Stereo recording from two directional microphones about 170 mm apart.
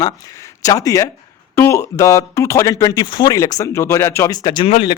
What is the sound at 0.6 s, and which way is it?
A man's voice, 20° left (ahead or behind).